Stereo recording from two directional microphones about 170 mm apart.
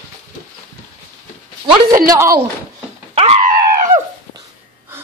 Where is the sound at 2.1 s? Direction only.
15° right (ahead or behind).